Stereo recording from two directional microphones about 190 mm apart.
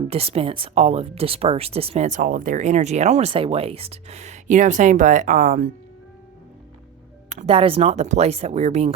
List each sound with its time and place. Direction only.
0.1 s speech: 30° right (ahead or behind)
7.3 s speech: 35° right (ahead or behind)